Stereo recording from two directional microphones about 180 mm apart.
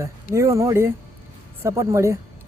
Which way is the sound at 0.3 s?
15° right (ahead or behind).